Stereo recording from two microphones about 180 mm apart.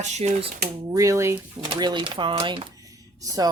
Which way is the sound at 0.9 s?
15° right (ahead or behind).